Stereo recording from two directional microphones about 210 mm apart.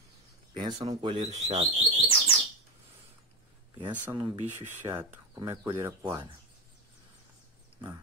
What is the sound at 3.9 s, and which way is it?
Speech, 10° right (ahead or behind).